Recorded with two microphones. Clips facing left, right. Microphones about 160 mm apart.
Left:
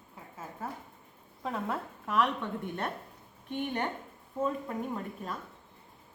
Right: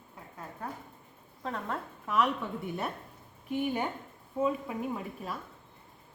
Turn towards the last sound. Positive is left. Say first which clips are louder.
# right 1 dB
turn(degrees=-5)  # may be behind; listen again after turning